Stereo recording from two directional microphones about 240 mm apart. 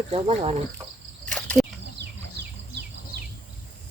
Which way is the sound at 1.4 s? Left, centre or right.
Centre.